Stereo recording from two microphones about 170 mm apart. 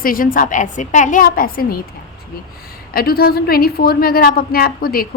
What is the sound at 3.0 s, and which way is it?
A woman's voice, 65° left (ahead or behind).